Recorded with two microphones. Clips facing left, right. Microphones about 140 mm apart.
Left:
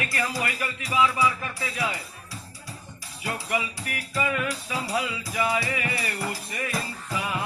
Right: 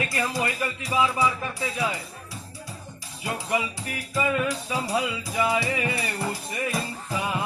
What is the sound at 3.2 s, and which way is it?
Music, 20° right (ahead or behind).